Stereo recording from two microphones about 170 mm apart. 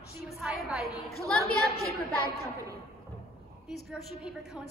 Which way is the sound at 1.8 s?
65° left (ahead or behind).